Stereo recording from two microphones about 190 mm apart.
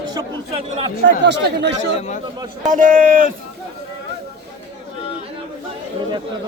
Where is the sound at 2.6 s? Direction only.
45° right (ahead or behind).